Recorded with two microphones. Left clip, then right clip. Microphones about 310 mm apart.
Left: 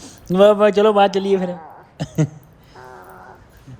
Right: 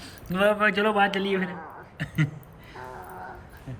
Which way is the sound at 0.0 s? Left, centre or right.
Centre.